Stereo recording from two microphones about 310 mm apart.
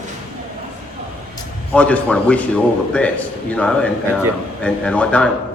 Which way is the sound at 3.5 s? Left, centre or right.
Centre.